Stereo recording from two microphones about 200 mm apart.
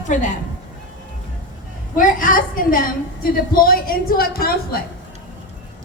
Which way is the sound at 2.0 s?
40° left (ahead or behind).